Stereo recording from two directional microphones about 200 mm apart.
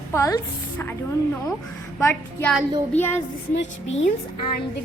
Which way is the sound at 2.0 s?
15° left (ahead or behind).